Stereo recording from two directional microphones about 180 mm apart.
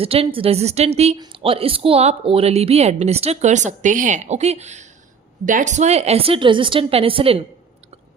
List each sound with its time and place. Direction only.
0.0 s speech: 30° right (ahead or behind)